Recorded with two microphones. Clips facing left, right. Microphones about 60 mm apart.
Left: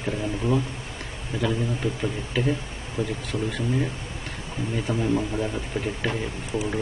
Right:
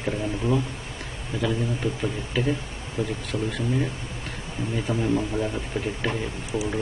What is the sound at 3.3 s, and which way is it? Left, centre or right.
Speech, left.